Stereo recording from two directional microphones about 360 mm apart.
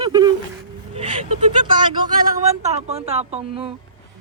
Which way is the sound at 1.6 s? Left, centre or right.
Centre.